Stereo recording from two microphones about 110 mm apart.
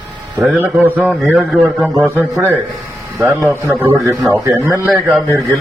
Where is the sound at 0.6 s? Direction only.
15° right (ahead or behind).